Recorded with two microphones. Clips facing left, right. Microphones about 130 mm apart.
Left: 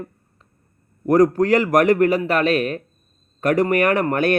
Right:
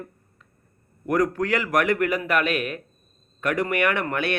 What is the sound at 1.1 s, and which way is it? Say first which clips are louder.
A man's voice: left 8 dB; 40° left (ahead or behind).